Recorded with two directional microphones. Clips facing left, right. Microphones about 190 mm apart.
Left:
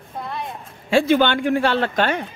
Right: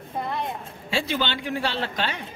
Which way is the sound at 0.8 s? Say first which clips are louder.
Left 10 dB; 50° left (ahead or behind).